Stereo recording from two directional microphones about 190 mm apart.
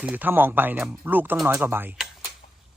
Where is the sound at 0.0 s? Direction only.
10° right (ahead or behind).